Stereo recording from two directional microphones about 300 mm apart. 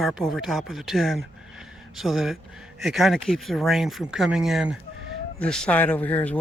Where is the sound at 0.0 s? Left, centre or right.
Centre.